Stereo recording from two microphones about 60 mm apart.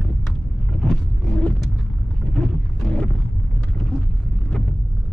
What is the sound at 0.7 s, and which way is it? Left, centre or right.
Vehicle, centre.